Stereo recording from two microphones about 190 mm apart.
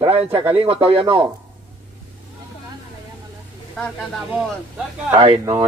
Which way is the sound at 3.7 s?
Centre (ahead or behind).